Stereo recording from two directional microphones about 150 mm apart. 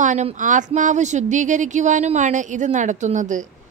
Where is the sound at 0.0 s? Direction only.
55° right (ahead or behind).